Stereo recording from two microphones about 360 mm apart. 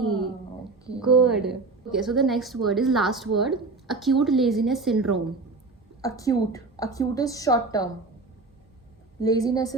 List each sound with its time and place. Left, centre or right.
1.0 s a woman's voice: centre
6.0 s a woman's voice: centre
9.2 s a woman's voice: centre